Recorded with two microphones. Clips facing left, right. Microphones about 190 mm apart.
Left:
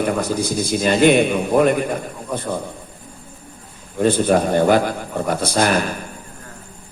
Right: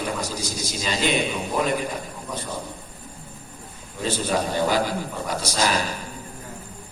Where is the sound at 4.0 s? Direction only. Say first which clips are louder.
Left 9 dB; 55° left (ahead or behind).